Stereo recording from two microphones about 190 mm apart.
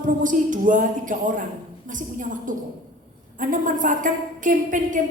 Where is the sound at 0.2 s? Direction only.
45° right (ahead or behind).